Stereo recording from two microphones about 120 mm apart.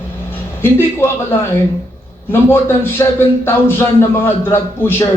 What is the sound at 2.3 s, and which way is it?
A man's voice, 20° left (ahead or behind).